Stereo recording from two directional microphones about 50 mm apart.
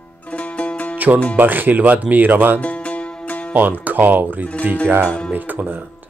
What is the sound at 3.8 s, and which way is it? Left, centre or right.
Speech, right.